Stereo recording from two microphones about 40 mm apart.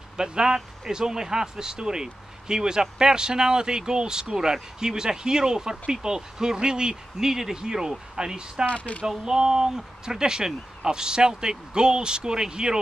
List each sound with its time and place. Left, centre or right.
0.2 s speech: centre
8.6 s speech: left
9.2 s speech: centre